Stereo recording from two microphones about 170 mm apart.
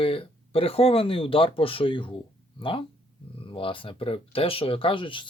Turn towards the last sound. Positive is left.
turn(degrees=30)  # may be behind; listen again after turning